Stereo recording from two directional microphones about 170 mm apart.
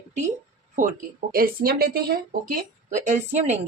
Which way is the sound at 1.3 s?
65° right (ahead or behind).